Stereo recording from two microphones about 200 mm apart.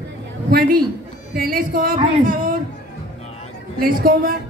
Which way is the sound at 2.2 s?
45° right (ahead or behind).